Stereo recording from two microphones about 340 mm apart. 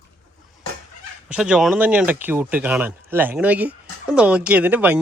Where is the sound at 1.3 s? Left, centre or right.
Centre.